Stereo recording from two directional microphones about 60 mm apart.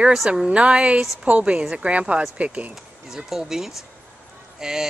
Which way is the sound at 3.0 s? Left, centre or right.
Centre.